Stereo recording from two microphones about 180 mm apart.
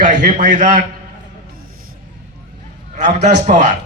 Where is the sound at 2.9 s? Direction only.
40° right (ahead or behind).